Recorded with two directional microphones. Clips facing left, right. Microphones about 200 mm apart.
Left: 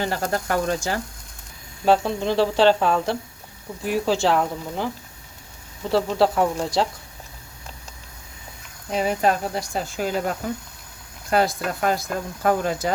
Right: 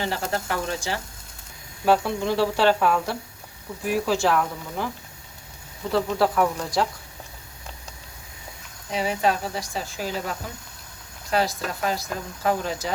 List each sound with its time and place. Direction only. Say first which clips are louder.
0.0 s speech: left 3 dB; 45° left (ahead or behind)
1.8 s speech: left 2 dB; 20° left (ahead or behind)
5.9 s speech: left 3 dB; 30° left (ahead or behind)
8.9 s speech: left 3 dB; 50° left (ahead or behind)